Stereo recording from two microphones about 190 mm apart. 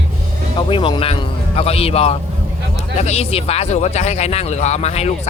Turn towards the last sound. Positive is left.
turn(degrees=35)  # may be behind; listen again after turning